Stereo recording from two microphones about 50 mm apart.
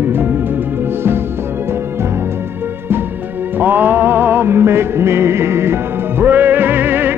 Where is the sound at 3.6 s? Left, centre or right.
Right.